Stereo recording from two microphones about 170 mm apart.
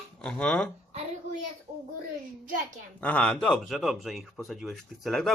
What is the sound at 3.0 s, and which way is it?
Speech, 10° left (ahead or behind).